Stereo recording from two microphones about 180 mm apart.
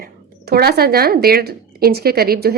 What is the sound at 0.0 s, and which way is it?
Speech, 60° right (ahead or behind).